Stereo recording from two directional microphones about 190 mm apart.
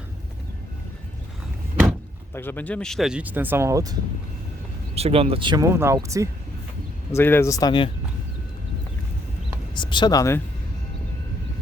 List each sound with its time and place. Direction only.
1.7 s door: 10° right (ahead or behind)
2.3 s speech: 10° left (ahead or behind); by 3.9 s 15° right (ahead or behind)
4.9 s speech: 30° right (ahead or behind); by 6.2 s 15° right (ahead or behind)
7.1 s speech: 10° left (ahead or behind)
9.7 s speech: 25° left (ahead or behind)